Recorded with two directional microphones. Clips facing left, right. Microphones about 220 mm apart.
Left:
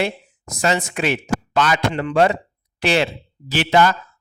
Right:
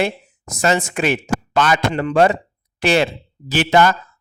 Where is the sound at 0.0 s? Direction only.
45° right (ahead or behind).